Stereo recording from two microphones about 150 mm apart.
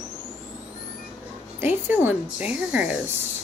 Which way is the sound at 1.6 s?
15° right (ahead or behind).